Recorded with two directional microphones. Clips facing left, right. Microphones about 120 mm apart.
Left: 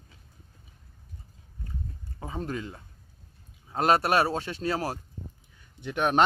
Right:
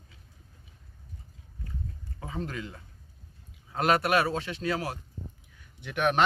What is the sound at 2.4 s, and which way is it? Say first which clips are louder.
Speech: left 4 dB; 30° left (ahead or behind).